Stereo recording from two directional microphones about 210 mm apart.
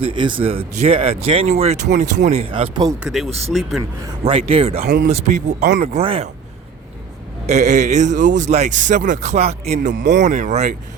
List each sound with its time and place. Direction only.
0.0 s speech: 25° right (ahead or behind)
3.0 s speech: centre (ahead or behind)
4.2 s speech: 30° right (ahead or behind)
7.4 s speech: 35° right (ahead or behind)
9.9 s speech: 55° right (ahead or behind)
10.2 s speech: 35° right (ahead or behind)